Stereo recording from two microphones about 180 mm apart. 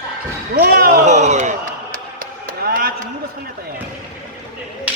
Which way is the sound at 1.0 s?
40° right (ahead or behind).